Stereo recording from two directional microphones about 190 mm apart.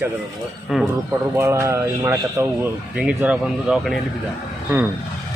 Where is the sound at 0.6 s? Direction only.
Centre (ahead or behind).